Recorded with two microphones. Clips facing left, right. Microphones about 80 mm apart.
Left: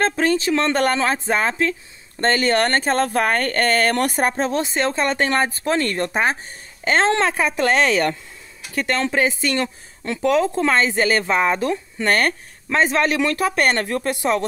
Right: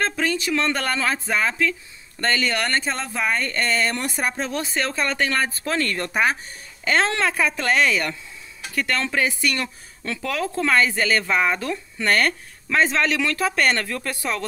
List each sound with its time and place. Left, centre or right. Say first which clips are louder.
0.0 s speech: left 5 dB; left
7.9 s speech: left 5 dB; left
8.7 s speech: left 3 dB; left